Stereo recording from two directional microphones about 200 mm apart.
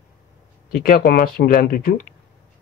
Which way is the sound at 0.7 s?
40° left (ahead or behind).